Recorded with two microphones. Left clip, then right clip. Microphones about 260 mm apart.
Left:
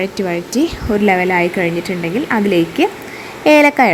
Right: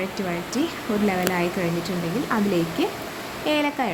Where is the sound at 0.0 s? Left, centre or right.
Left.